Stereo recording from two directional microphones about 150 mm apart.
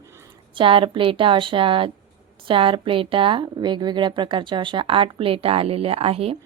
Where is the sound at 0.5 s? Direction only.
35° right (ahead or behind).